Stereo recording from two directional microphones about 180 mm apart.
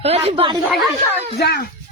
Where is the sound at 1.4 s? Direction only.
65° left (ahead or behind).